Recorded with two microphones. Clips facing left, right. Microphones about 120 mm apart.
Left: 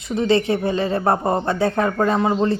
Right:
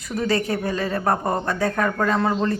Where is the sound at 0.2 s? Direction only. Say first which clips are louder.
Left 4 dB; 25° left (ahead or behind).